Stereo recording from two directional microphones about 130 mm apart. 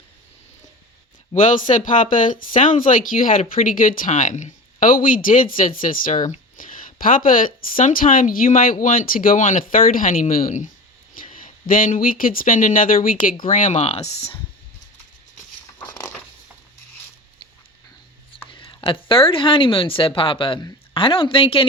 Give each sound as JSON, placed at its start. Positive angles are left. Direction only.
{"t": 1.3, "sound": "speech", "side_deg": 75}
{"t": 15.8, "sound": "a sound", "side_deg": 30}
{"t": 18.4, "sound": "speech", "side_deg": 40}